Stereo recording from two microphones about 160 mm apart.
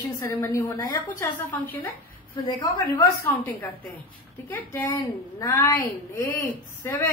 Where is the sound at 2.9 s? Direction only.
15° left (ahead or behind).